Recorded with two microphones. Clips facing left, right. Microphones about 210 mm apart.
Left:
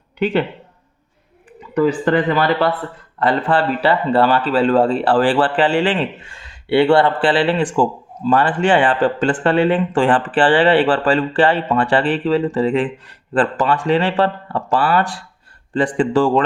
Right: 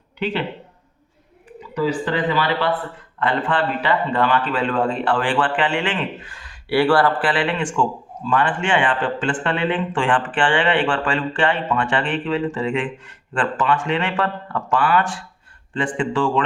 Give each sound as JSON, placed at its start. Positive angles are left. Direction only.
{"t": 1.7, "sound": "a man's voice", "side_deg": 50}